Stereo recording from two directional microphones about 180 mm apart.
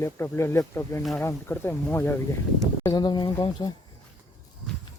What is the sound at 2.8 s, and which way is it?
Speech, 25° left (ahead or behind).